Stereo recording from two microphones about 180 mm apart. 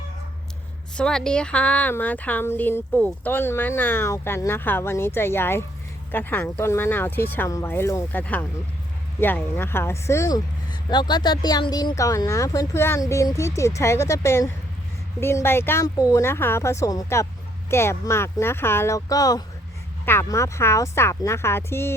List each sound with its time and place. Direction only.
0.9 s speech: 5° left (ahead or behind)